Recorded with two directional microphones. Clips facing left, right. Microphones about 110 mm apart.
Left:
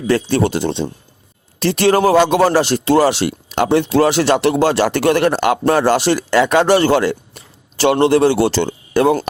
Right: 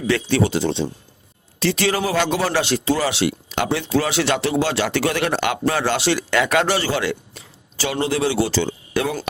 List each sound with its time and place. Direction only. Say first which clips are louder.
0.1 s a man's voice: left 4 dB; 45° left (ahead or behind)
4.4 s a man's voice: left 6 dB; 60° left (ahead or behind); by 6.4 s 40° left (ahead or behind)
6.7 s a man's voice: left 8 dB; 55° left (ahead or behind)